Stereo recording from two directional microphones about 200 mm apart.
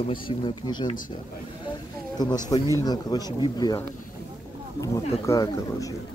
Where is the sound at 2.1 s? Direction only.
20° left (ahead or behind).